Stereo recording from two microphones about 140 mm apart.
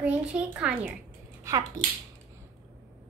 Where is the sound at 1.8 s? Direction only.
25° right (ahead or behind).